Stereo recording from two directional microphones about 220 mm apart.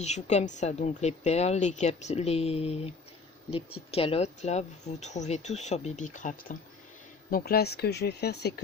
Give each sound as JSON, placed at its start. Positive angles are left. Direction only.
{"t": 0.0, "sound": "a woman's voice", "side_deg": 30}
{"t": 3.9, "sound": "a woman's voice", "side_deg": 25}